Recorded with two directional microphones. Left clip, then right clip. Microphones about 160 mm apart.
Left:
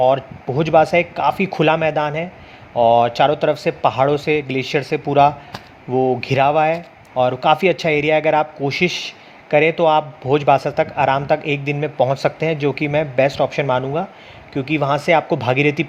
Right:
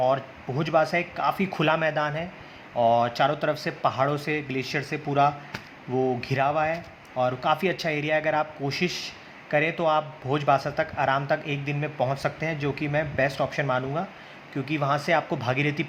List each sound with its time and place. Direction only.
0.0 s a man's voice: 35° left (ahead or behind)